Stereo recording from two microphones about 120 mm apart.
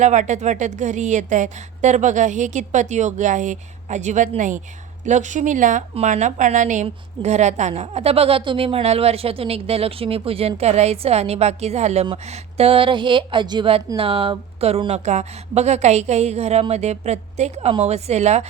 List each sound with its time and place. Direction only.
0.0 s a woman's voice: 80° right
5.9 s a woman's voice: 75° right (ahead or behind); by 6.8 s 90° right
6.8 s a woman's voice: 70° right (ahead or behind)
14.8 s a woman's voice: 70° right (ahead or behind)